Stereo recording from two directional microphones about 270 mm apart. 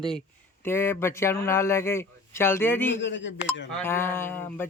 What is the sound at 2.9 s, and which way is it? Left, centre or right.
Speech, left.